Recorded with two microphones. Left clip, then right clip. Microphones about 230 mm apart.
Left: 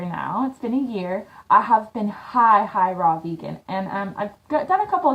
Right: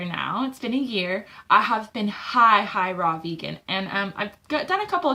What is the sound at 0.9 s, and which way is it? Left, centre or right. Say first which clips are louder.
A woman's voice: right 1 dB; centre.